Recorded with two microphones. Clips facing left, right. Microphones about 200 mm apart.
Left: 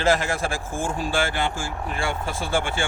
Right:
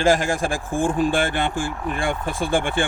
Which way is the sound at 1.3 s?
55° right (ahead or behind).